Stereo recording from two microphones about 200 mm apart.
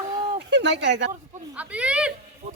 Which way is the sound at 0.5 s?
60° right (ahead or behind).